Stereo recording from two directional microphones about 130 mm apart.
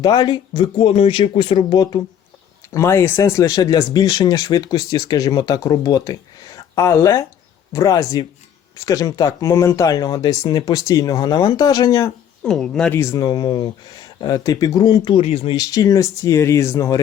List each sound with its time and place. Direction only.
0.0 s speech: 30° left (ahead or behind)
2.7 s speech: 20° left (ahead or behind)
12.4 s speech: 5° left (ahead or behind)
13.1 s speech: 35° left (ahead or behind)
15.1 s speech: 45° left (ahead or behind)
15.5 s speech: 30° left (ahead or behind)